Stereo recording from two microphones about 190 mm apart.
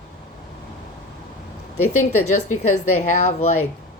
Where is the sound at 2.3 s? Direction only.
40° left (ahead or behind).